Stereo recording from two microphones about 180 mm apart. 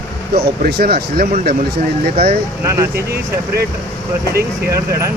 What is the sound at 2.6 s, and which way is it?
Speech, 15° right (ahead or behind).